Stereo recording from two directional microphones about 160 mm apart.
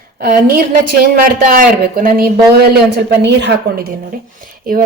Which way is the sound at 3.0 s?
90° right.